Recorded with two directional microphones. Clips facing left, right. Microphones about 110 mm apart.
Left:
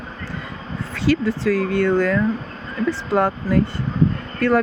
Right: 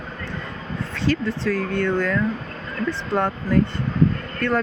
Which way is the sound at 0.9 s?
10° left (ahead or behind).